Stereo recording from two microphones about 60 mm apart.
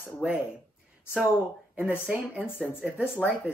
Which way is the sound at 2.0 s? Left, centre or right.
Centre.